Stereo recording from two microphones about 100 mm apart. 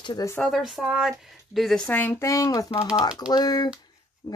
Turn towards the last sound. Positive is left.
turn(degrees=30)  # may be behind; listen again after turning